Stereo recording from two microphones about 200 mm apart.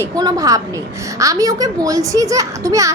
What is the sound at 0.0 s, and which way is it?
A child's voice, 20° right (ahead or behind).